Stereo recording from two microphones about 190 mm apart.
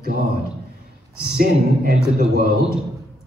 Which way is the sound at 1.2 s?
55° right (ahead or behind).